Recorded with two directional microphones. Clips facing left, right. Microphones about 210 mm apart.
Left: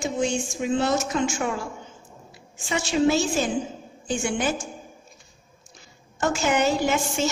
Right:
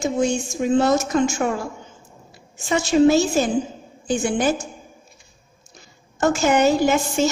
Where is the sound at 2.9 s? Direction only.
45° right (ahead or behind).